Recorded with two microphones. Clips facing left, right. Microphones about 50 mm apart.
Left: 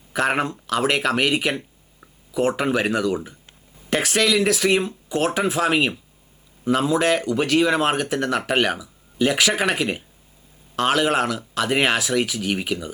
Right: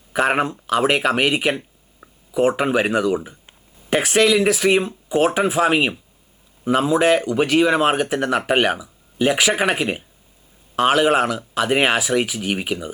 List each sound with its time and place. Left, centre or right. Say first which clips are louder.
0.1 s speech: right 3 dB; centre